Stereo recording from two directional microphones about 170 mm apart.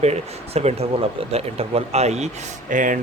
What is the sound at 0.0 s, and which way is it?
Speech, 40° right (ahead or behind).